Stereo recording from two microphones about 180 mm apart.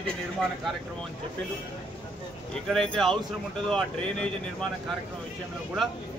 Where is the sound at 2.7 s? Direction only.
5° left (ahead or behind).